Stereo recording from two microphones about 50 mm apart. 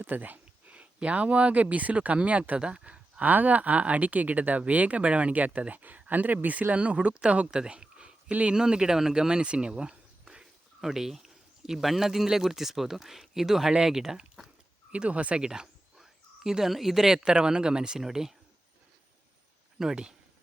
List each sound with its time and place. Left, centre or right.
0.0 s a sound: right
0.8 s speech: right
8.5 s speech: centre
14.9 s speech: right
15.4 s speech: centre
19.8 s speech: centre